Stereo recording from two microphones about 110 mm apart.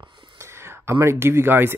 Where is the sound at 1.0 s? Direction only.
25° right (ahead or behind).